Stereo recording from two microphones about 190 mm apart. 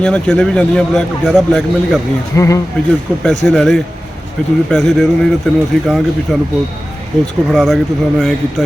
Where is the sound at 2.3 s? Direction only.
15° left (ahead or behind).